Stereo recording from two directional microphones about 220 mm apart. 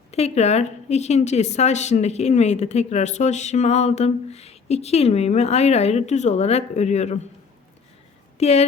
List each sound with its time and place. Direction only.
0.1 s a woman's voice: 30° left (ahead or behind)
8.4 s speech: 30° left (ahead or behind)